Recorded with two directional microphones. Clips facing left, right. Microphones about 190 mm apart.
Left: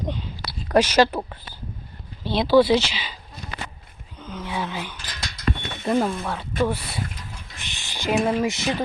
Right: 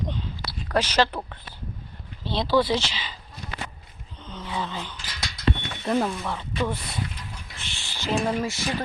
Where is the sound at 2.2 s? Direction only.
10° left (ahead or behind).